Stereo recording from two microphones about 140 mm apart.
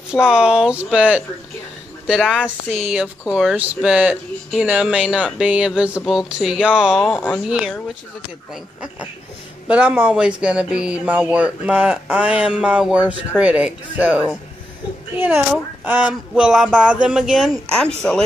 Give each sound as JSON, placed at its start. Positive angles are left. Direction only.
{"t": 0.1, "sound": "speech", "side_deg": -5}
{"t": 7.1, "sound": "speech", "side_deg": 15}
{"t": 7.4, "sound": "speech", "side_deg": -5}
{"t": 9.7, "sound": "speech", "side_deg": -10}